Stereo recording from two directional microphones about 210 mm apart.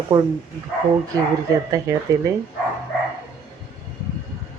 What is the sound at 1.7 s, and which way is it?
Speech, 15° right (ahead or behind).